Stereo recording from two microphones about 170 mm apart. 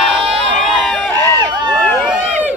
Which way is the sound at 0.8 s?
5° left (ahead or behind).